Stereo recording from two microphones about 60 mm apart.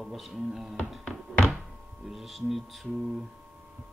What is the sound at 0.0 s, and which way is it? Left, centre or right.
Speech, centre.